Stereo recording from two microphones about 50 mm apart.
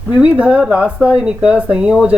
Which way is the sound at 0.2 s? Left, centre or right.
Right.